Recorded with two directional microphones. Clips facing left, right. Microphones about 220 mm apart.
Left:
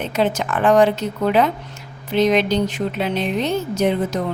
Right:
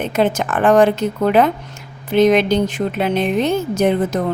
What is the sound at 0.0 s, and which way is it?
Speech, 50° right (ahead or behind).